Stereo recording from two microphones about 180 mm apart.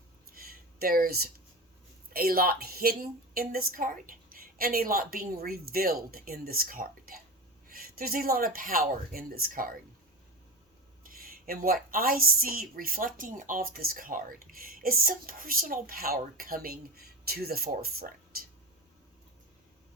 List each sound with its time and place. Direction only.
0.3 s a sound: 55° right (ahead or behind)
2.1 s a woman's voice: 55° right (ahead or behind)
11.0 s a woman's voice: 55° right (ahead or behind)
18.3 s whispering: 55° right (ahead or behind)